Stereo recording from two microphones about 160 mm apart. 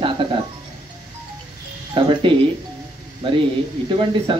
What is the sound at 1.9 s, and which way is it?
Speech, 30° right (ahead or behind).